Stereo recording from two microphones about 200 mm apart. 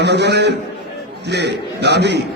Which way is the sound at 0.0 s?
55° right (ahead or behind).